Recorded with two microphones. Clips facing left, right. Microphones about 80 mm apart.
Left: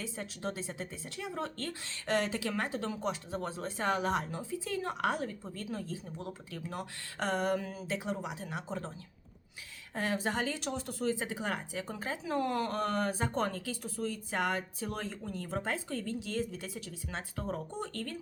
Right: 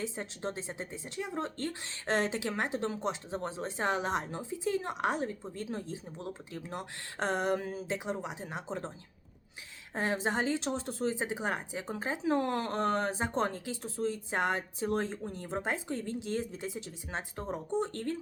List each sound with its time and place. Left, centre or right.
0.0 s a woman's voice: right
9.9 s a woman's voice: right